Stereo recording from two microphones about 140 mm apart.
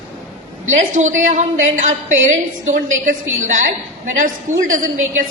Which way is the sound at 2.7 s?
75° right (ahead or behind).